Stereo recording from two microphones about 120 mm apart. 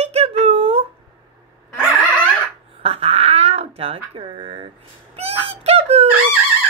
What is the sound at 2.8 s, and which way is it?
Babbling, 60° right (ahead or behind).